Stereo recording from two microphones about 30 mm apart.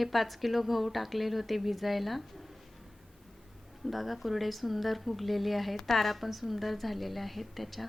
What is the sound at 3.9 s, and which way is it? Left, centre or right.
A woman's voice, centre.